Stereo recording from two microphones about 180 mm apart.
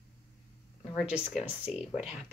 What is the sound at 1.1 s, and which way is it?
Speech, 5° right (ahead or behind).